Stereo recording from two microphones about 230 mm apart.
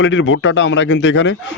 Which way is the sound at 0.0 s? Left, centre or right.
Left.